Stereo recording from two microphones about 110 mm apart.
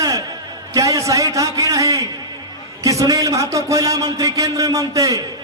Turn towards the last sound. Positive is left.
turn(degrees=-30)  # may be behind; listen again after turning